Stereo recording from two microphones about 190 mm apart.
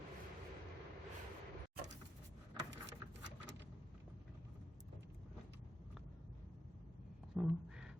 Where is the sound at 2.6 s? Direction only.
70° right (ahead or behind).